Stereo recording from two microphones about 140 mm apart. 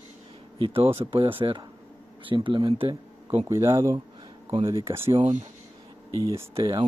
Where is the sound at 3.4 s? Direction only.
20° right (ahead or behind).